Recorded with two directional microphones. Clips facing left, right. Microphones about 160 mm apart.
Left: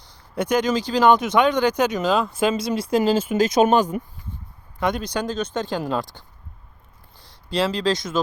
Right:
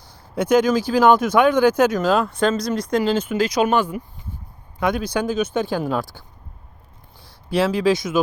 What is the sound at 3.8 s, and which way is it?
Speech, 40° left (ahead or behind).